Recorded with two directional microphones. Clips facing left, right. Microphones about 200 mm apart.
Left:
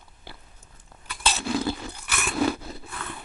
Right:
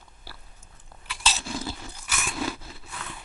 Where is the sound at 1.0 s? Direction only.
55° left (ahead or behind).